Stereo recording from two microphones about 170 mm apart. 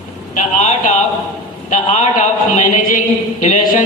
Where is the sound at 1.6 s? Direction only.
45° left (ahead or behind).